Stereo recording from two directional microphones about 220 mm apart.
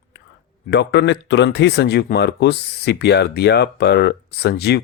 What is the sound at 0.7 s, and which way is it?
Speech, 55° left (ahead or behind).